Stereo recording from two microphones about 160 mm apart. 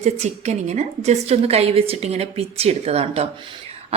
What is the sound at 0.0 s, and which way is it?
A woman's voice, 45° right (ahead or behind).